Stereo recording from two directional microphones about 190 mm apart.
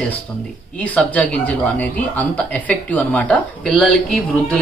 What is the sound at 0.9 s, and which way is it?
Speech, 5° left (ahead or behind).